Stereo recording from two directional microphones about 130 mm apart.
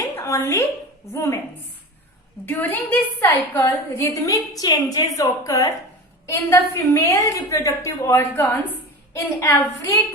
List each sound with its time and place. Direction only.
0.2 s a woman's voice: 20° left (ahead or behind)
2.5 s a woman's voice: 15° left (ahead or behind)